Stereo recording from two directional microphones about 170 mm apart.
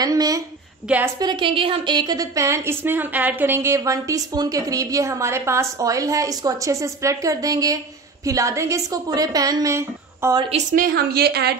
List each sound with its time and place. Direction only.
0.0 s a woman's voice: 20° right (ahead or behind)
0.8 s a woman's voice: 10° right (ahead or behind)
1.2 s a woman's voice: 25° right (ahead or behind)
10.5 s a woman's voice: 50° right (ahead or behind); by 11.5 s 70° right (ahead or behind)